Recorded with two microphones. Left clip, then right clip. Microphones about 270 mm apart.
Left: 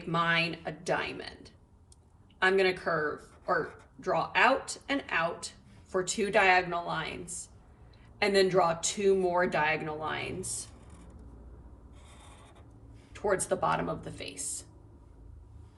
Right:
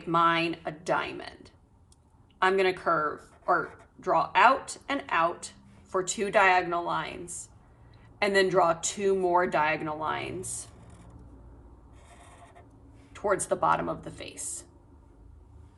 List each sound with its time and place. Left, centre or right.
0.0 s speech: centre
2.4 s a woman's voice: centre
8.2 s speech: centre
13.2 s speech: centre